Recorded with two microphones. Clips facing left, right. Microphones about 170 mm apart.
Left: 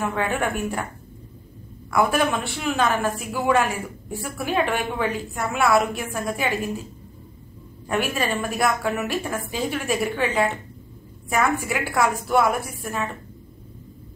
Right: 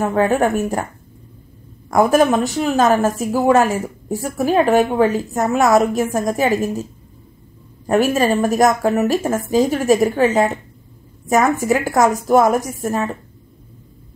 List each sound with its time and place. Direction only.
0.0 s a woman's voice: 40° right (ahead or behind)
1.9 s a woman's voice: 40° right (ahead or behind)